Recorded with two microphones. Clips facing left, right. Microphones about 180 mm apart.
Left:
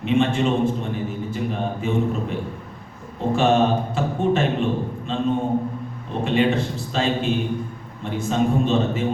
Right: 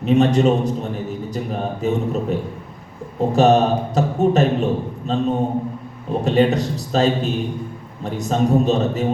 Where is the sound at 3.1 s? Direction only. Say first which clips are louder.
Right 4 dB; 40° right (ahead or behind).